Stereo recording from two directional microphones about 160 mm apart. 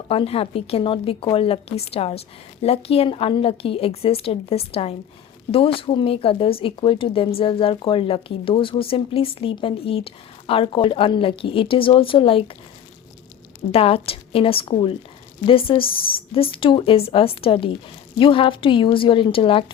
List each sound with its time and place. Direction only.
0.1 s speech: 35° left (ahead or behind)
13.7 s speech: 35° left (ahead or behind)